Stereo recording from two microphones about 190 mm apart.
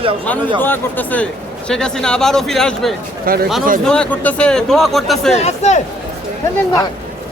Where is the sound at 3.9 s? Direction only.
5° left (ahead or behind).